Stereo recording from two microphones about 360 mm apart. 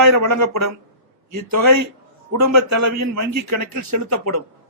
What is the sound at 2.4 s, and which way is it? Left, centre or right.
A man's voice, right.